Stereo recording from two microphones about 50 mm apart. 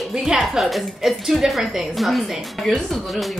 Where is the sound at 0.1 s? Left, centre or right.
Centre.